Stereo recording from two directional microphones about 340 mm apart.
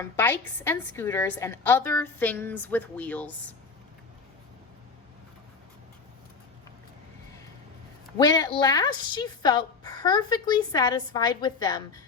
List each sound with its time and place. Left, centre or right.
0.0 s a woman's voice: centre
8.2 s a woman's voice: centre